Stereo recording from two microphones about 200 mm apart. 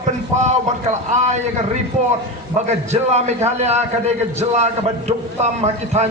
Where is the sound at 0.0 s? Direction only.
35° right (ahead or behind).